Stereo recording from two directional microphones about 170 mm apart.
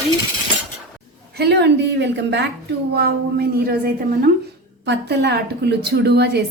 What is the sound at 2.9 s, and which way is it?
Speech, 70° right (ahead or behind).